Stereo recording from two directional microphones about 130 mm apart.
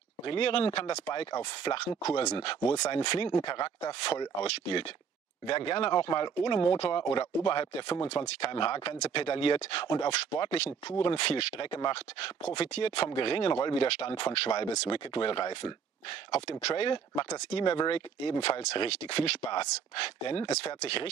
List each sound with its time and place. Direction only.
0.3 s speech: 40° left (ahead or behind)
4.4 s speech: 50° left (ahead or behind)
15.3 s speech: 35° left (ahead or behind)
16.3 s speech: 50° left (ahead or behind)